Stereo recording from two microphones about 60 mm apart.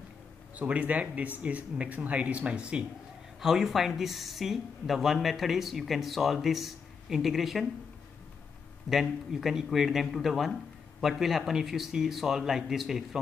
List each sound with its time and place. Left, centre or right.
0.6 s speech: right
3.3 s speech: centre
8.8 s speech: centre